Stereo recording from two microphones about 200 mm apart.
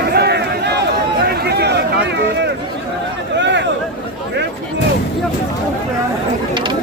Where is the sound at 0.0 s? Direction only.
55° right (ahead or behind).